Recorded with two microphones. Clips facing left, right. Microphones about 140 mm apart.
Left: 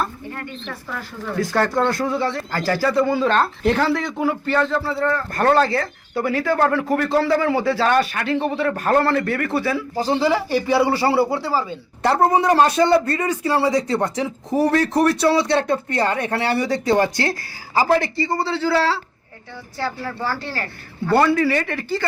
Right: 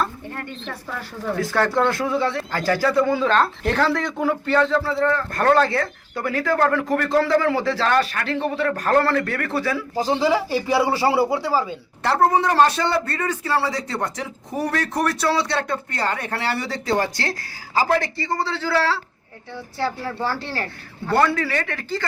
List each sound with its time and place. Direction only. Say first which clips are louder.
1.5 s a man's voice: left 1 dB; 10° left (ahead or behind)
1.9 s a man's voice: even; centre (ahead or behind)
9.9 s speech: even; 10° right (ahead or behind)
12.0 s a man's voice: left 2 dB; 15° left (ahead or behind)
19.8 s speech: right 1 dB; 25° right (ahead or behind)
21.2 s a man's voice: left 3 dB; 10° left (ahead or behind)